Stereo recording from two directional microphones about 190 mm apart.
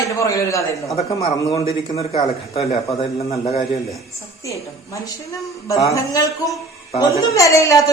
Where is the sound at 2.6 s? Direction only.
30° left (ahead or behind).